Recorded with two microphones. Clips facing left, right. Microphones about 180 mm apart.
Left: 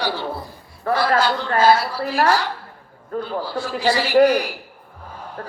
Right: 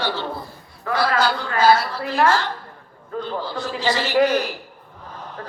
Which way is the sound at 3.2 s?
5° left (ahead or behind).